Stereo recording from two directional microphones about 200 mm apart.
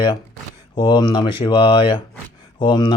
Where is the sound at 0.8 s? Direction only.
25° left (ahead or behind).